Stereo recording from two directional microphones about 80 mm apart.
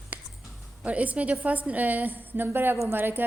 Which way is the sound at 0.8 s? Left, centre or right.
Centre.